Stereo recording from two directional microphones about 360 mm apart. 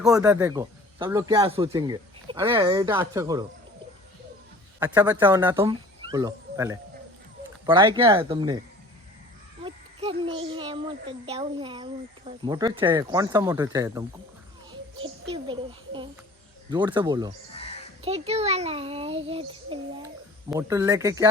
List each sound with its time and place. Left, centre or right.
0.0 s speech: centre
4.8 s speech: centre
9.6 s a child's voice: centre
17.5 s a sound: centre
18.0 s speech: centre